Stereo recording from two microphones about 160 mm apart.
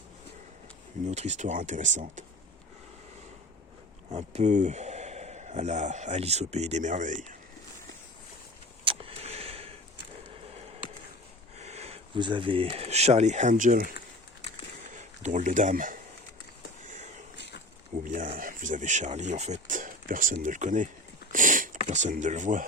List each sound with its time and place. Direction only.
1.0 s speech: 45° right (ahead or behind)
4.1 s speech: 45° right (ahead or behind)
8.8 s vehicle: 35° right (ahead or behind)
11.5 s speech: 45° right (ahead or behind); by 13.9 s 60° right (ahead or behind)
14.9 s speech: 50° right (ahead or behind)
16.8 s a sound: 50° right (ahead or behind)
17.3 s a sound: 90° left
18.0 s a sound: 55° right (ahead or behind)
18.3 s speech: 55° right (ahead or behind)